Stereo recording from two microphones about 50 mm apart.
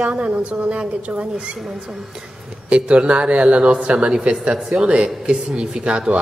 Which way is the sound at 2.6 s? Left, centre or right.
Right.